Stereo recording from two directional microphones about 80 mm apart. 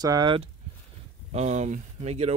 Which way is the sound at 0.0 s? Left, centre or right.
Right.